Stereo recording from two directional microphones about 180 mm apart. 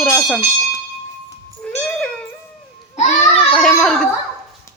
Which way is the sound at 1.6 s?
5° left (ahead or behind).